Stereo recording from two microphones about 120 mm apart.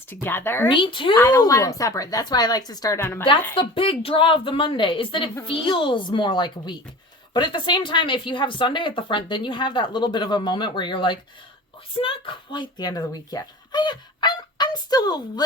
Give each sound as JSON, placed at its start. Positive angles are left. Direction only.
{"t": 0.1, "sound": "speech", "side_deg": 15}
{"t": 0.7, "sound": "a woman's voice", "side_deg": 45}
{"t": 1.4, "sound": "speech", "side_deg": 30}
{"t": 3.0, "sound": "a woman's voice", "side_deg": 20}
{"t": 3.5, "sound": "a woman's voice", "side_deg": 50}